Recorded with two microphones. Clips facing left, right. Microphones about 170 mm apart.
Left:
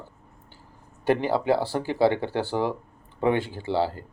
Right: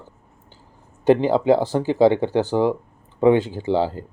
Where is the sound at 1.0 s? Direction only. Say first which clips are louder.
Right 6 dB; 20° right (ahead or behind).